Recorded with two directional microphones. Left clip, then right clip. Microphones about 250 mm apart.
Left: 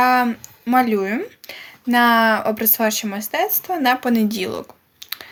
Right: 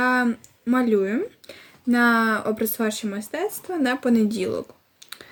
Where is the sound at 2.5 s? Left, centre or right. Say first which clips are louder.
Left 5 dB; centre.